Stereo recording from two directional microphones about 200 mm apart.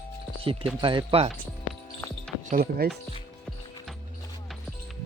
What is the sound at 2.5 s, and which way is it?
Speech, 50° right (ahead or behind).